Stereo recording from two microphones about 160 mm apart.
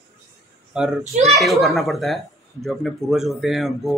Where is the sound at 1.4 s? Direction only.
Centre (ahead or behind).